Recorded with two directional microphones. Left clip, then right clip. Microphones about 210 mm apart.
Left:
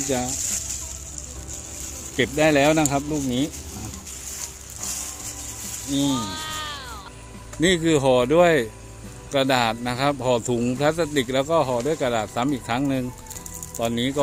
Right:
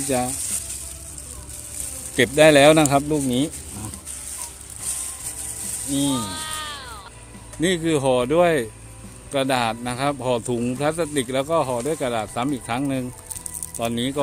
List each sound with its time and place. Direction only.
0.1 s sizzle: 40° right (ahead or behind)
0.4 s sizzle: centre (ahead or behind)
2.1 s speech: 55° right (ahead or behind)
5.9 s a sound: 10° right (ahead or behind)
7.6 s a man's voice: centre (ahead or behind)